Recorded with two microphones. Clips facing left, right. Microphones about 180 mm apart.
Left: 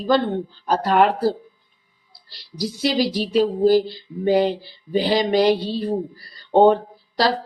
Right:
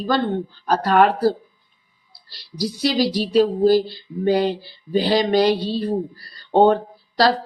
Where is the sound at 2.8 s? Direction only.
20° left (ahead or behind).